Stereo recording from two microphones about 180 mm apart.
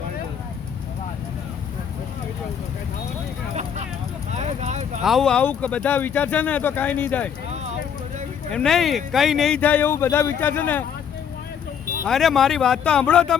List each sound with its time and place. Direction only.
3.5 s vehicle: 40° right (ahead or behind)
5.0 s speech: centre (ahead or behind)
8.5 s speech: centre (ahead or behind)
12.0 s speech: centre (ahead or behind)